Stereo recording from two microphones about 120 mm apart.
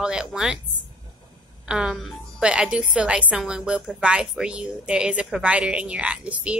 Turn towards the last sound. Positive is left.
turn(degrees=-10)  # may be behind; listen again after turning